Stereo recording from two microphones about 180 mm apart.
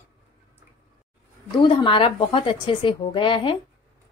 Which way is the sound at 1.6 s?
25° left (ahead or behind).